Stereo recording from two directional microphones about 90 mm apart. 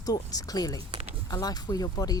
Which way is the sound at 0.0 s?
45° left (ahead or behind).